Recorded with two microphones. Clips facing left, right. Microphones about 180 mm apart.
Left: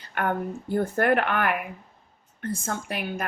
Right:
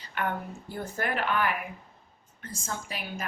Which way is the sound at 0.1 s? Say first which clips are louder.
Left 5 dB; 50° left (ahead or behind).